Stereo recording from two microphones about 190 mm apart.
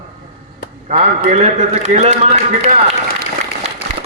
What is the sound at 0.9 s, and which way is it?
A man's voice, 35° right (ahead or behind).